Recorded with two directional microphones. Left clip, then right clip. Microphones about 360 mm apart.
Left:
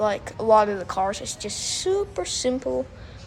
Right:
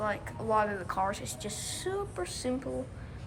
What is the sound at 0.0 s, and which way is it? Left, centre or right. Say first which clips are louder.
A woman's voice: left 10 dB; centre.